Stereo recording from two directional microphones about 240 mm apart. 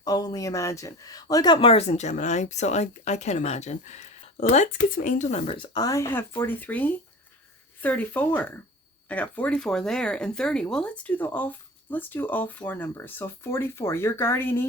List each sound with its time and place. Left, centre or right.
0.0 s speech: centre